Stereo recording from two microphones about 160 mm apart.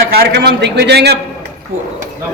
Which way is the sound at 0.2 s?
90° right.